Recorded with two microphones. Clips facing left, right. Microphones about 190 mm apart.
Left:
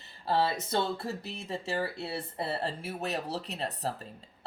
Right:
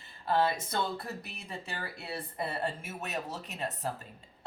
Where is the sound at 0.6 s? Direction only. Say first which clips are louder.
Left 3 dB; 30° left (ahead or behind).